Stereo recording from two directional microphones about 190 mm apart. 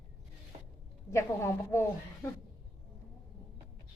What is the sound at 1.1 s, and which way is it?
Speech, 15° left (ahead or behind).